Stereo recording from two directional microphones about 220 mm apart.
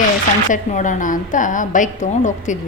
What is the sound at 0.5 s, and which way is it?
A woman's voice, 35° left (ahead or behind).